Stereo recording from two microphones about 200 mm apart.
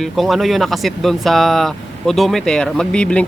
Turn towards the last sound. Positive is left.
turn(degrees=5)  # may be behind; listen again after turning